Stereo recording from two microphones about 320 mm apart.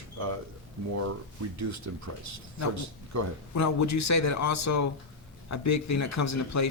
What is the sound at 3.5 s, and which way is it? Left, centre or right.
Speech, left.